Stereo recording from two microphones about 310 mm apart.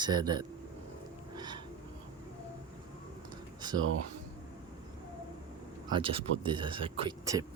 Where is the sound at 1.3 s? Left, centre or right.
Centre.